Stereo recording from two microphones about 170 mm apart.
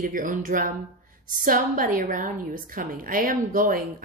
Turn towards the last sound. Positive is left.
turn(degrees=-55)  # may be behind; listen again after turning